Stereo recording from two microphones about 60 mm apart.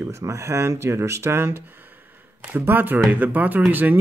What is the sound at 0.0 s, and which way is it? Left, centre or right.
Speech, right.